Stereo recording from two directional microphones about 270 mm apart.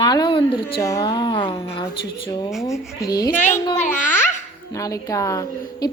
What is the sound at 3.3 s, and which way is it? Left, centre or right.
Speech, left.